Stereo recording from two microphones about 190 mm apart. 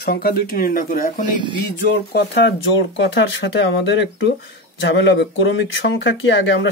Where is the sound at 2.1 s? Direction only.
60° left (ahead or behind).